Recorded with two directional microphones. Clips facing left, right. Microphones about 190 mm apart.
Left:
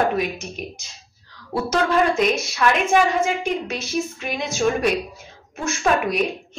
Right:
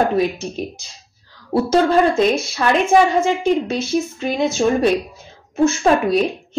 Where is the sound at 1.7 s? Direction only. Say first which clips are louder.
Right 4 dB; 30° right (ahead or behind).